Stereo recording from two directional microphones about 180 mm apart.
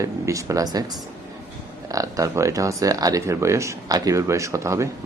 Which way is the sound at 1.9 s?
20° right (ahead or behind).